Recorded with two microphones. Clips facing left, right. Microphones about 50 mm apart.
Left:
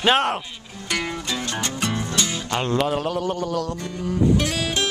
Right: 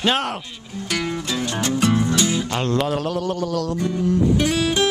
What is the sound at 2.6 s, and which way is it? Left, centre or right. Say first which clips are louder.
Music: left 2 dB; centre.